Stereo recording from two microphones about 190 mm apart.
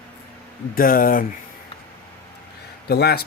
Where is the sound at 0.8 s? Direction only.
50° left (ahead or behind).